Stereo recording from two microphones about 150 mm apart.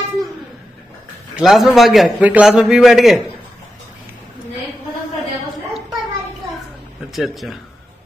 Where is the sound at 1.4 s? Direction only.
Centre (ahead or behind).